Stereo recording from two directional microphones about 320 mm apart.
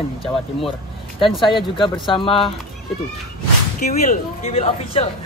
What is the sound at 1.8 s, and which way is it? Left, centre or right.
Speech, centre.